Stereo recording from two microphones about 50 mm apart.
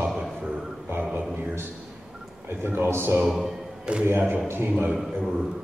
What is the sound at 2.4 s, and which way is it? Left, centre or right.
Speech, right.